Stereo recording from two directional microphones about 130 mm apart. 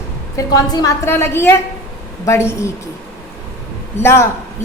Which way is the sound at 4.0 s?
20° left (ahead or behind).